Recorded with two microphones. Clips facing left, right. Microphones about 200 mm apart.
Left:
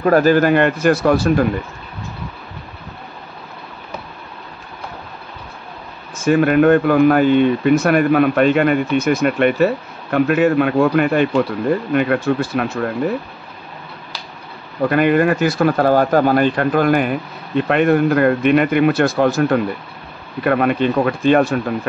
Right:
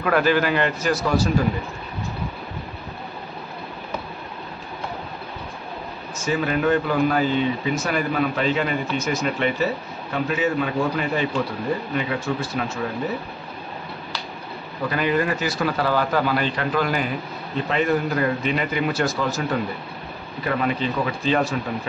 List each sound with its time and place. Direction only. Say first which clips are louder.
0.0 s speech: left 7 dB; 40° left (ahead or behind); by 1.4 s 60° left (ahead or behind)
6.1 s speech: left 10 dB; 55° left (ahead or behind)
14.8 s speech: left 8 dB; 60° left (ahead or behind)